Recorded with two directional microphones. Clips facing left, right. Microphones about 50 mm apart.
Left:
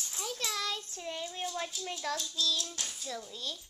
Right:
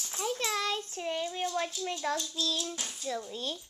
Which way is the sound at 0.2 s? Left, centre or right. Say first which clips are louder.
Right 5 dB; right.